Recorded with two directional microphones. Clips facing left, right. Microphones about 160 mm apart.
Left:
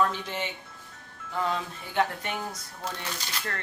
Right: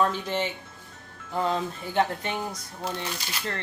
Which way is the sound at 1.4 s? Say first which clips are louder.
Right 3 dB; 35° right (ahead or behind).